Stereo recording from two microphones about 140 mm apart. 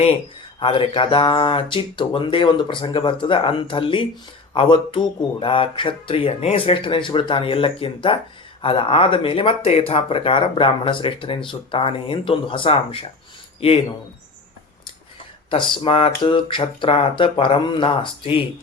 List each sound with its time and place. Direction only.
0.6 s speech: 35° left (ahead or behind)
15.4 s speech: 35° left (ahead or behind)